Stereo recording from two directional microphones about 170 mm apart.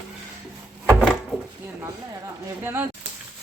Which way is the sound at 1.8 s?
15° right (ahead or behind).